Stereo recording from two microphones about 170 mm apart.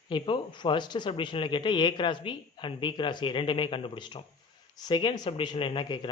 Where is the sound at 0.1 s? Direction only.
30° left (ahead or behind).